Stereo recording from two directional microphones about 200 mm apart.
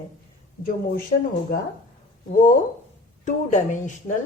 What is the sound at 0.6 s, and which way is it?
Speech, 45° left (ahead or behind).